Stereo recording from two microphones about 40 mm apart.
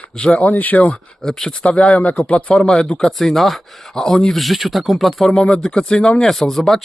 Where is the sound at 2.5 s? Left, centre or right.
Centre.